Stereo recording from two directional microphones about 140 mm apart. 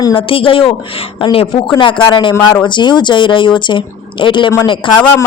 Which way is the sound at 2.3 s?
10° left (ahead or behind).